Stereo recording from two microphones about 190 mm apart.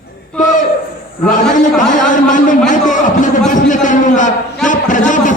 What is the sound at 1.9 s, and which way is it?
A man's voice, 40° left (ahead or behind).